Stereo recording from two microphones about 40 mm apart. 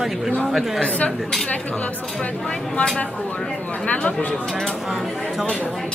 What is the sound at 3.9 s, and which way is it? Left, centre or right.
Speech, left.